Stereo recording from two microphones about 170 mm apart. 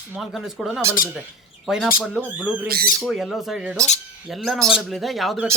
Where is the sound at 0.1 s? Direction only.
Centre (ahead or behind).